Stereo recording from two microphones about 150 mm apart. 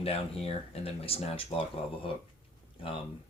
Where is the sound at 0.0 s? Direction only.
40° left (ahead or behind).